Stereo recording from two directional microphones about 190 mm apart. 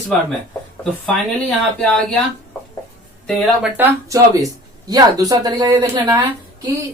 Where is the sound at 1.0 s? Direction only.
5° left (ahead or behind).